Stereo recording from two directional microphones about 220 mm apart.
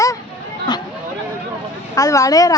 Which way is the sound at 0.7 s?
20° left (ahead or behind).